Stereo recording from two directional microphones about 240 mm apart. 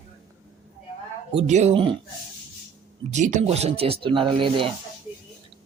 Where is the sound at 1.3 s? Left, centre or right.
Right.